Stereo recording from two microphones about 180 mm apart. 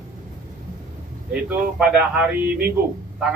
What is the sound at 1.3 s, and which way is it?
Speech, 5° right (ahead or behind).